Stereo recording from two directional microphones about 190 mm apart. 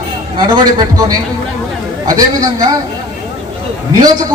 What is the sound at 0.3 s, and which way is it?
A man's voice, 20° right (ahead or behind).